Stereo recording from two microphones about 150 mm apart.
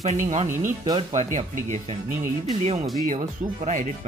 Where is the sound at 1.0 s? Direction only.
50° right (ahead or behind).